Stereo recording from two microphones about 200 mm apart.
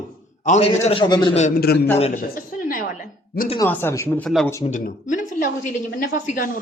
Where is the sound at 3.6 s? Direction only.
15° left (ahead or behind).